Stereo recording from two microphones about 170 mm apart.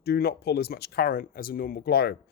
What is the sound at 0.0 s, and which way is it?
Speech, 65° left (ahead or behind).